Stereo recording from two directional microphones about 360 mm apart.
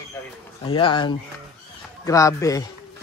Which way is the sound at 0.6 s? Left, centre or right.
Centre.